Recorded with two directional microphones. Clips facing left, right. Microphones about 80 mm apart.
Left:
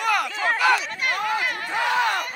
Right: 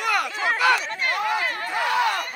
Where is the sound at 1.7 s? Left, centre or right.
Left.